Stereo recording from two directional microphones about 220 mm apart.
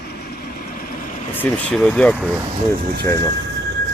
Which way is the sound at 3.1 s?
15° left (ahead or behind).